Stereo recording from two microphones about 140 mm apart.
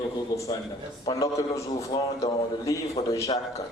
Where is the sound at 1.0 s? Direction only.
25° left (ahead or behind).